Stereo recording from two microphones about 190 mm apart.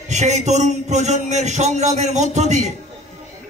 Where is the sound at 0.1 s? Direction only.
35° right (ahead or behind).